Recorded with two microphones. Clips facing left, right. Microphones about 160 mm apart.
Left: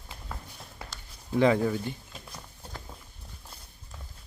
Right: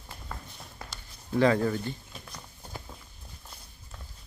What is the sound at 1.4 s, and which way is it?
Speech, 15° left (ahead or behind).